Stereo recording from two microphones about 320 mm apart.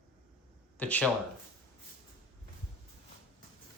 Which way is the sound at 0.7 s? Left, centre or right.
Centre.